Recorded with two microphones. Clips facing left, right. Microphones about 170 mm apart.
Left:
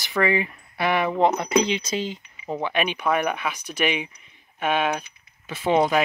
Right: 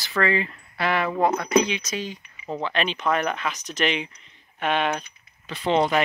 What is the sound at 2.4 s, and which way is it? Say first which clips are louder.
Speech: left 1 dB; 15° left (ahead or behind).